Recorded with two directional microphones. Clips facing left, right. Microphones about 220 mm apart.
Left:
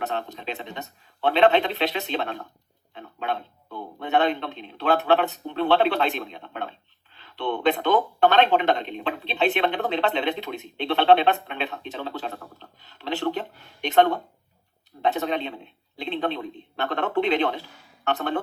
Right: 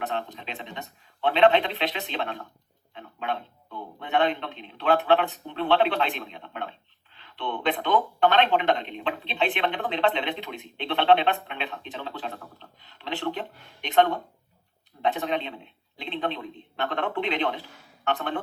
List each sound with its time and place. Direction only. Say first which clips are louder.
0.3 s a man's voice: left 4 dB; 40° left (ahead or behind)